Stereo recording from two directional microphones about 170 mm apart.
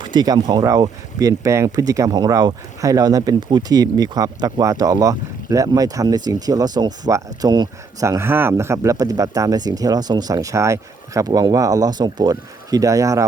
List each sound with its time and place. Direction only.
0.0 s speech: 25° right (ahead or behind)